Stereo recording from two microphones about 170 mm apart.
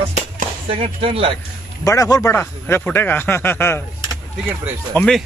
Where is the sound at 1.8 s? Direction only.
20° left (ahead or behind).